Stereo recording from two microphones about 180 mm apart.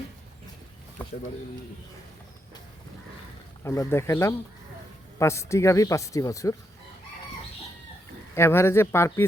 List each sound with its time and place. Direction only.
3.6 s speech: 15° left (ahead or behind)
8.4 s speech: 15° left (ahead or behind)